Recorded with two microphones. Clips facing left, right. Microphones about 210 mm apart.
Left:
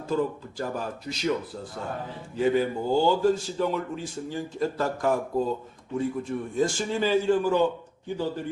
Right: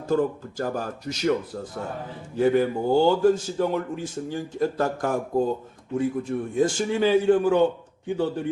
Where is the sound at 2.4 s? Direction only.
55° right (ahead or behind).